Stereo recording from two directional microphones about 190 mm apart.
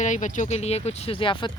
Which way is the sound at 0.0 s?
40° left (ahead or behind).